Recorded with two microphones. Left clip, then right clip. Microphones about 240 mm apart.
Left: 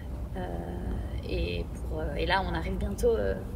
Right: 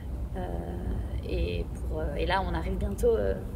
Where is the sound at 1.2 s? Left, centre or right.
Centre.